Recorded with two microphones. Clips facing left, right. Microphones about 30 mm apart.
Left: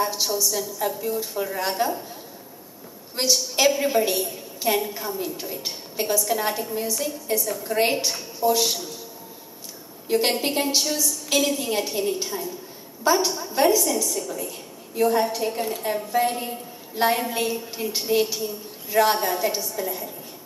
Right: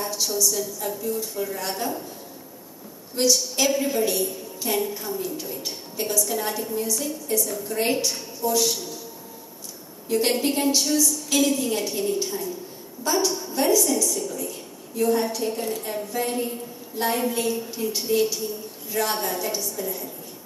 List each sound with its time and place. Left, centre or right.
0.0 s a woman's voice: centre
3.2 s a woman's voice: centre
10.0 s a woman's voice: centre